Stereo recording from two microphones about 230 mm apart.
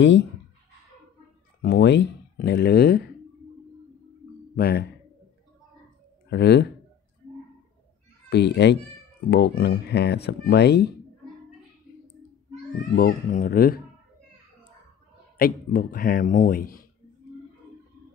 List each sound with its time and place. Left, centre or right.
0.0 s speech: left
1.6 s speech: left
4.6 s speech: left
6.3 s speech: left
8.3 s speech: left
12.9 s speech: left
15.3 s speech: left